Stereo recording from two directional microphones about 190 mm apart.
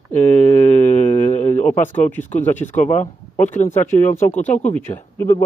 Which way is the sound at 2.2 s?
40° left (ahead or behind).